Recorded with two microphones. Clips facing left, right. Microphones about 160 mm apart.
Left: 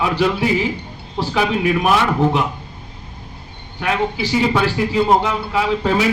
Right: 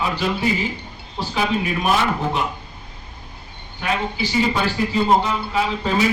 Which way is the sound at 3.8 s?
65° left (ahead or behind).